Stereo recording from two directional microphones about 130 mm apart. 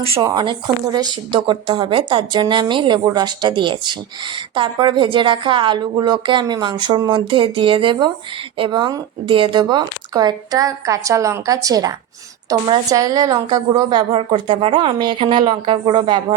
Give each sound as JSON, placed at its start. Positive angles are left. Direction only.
{"t": 0.2, "sound": "a woman's voice", "side_deg": -35}